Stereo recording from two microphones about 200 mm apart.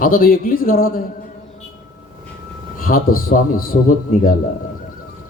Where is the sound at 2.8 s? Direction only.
45° left (ahead or behind).